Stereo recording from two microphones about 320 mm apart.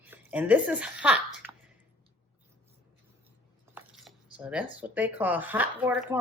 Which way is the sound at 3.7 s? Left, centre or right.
Centre.